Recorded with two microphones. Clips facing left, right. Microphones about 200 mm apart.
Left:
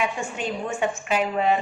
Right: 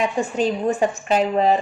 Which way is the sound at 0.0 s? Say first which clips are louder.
Right 7 dB; 35° right (ahead or behind).